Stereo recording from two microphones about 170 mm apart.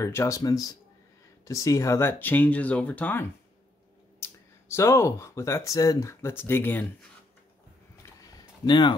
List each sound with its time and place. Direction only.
0.0 s speech: 15° left (ahead or behind)
8.6 s speech: 25° left (ahead or behind)